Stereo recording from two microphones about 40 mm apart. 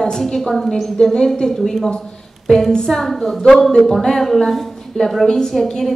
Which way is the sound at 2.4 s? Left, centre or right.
Centre.